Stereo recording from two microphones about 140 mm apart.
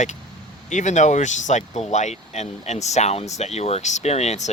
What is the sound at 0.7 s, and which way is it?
Speech, 60° left (ahead or behind).